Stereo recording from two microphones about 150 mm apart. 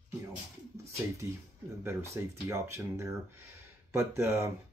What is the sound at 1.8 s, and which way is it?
Speech, 15° right (ahead or behind).